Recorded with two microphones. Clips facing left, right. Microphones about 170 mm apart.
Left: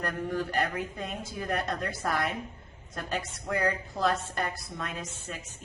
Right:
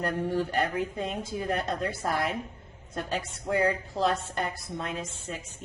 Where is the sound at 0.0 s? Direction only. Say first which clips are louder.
Right 3 dB; 30° right (ahead or behind).